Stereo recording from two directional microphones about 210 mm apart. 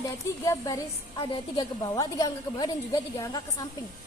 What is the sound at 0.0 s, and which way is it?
A woman's voice, 15° left (ahead or behind).